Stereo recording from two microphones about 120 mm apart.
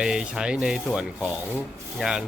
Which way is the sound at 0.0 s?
5° right (ahead or behind).